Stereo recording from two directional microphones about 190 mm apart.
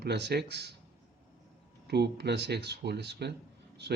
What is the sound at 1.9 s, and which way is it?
Speech, 60° right (ahead or behind).